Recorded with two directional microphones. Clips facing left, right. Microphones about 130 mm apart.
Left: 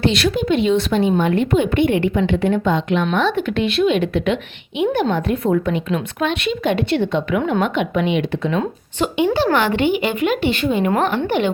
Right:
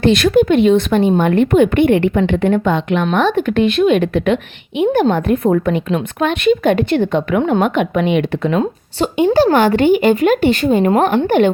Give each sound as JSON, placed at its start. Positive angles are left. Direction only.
{"t": 0.0, "sound": "a woman's voice", "side_deg": -50}
{"t": 3.1, "sound": "a woman's voice", "side_deg": -45}